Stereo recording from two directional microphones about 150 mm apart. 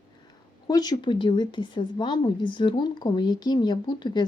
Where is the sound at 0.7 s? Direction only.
25° left (ahead or behind).